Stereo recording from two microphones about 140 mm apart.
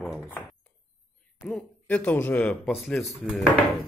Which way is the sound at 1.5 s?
10° left (ahead or behind).